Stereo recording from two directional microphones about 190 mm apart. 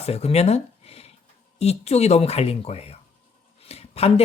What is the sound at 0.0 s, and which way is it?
Speech, 35° left (ahead or behind).